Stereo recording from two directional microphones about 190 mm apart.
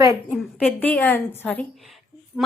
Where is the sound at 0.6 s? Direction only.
5° left (ahead or behind).